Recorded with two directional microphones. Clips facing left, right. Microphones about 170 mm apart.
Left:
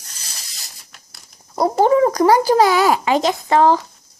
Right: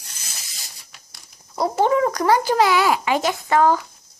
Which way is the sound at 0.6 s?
Centre (ahead or behind).